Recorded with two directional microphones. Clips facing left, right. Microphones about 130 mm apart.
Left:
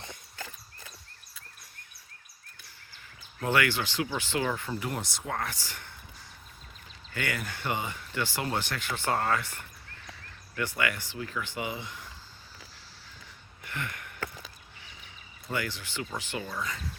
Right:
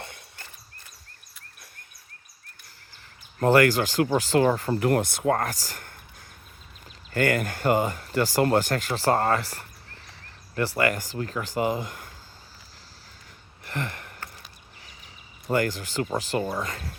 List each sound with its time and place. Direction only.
3.4 s speech: 40° right (ahead or behind)
4.7 s speech: 60° right (ahead or behind); by 5.9 s 40° right (ahead or behind)
7.1 s speech: 45° right (ahead or behind)
13.7 s a sound: 35° right (ahead or behind)
15.4 s speech: 45° right (ahead or behind)